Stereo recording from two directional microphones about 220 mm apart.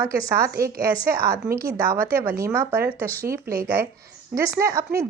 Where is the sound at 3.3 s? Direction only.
40° right (ahead or behind).